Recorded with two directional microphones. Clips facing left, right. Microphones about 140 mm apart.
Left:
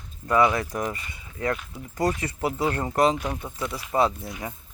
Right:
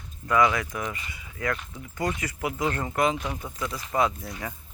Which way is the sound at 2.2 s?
35° left (ahead or behind).